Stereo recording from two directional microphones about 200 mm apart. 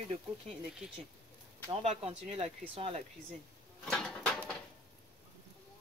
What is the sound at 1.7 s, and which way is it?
Speech, 30° right (ahead or behind).